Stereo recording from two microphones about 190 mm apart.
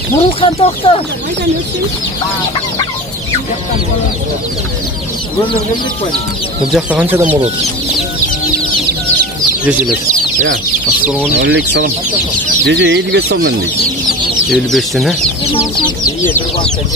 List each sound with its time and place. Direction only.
0.4 s speech: 30° left (ahead or behind)
6.7 s speech: 10° right (ahead or behind)
9.7 s speech: 5° right (ahead or behind)
11.3 s speech: 65° right (ahead or behind)
14.5 s speech: centre (ahead or behind)
16.3 s speech: 10° left (ahead or behind)